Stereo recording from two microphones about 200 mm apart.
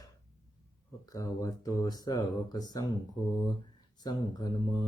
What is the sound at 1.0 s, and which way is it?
Speech, 15° left (ahead or behind).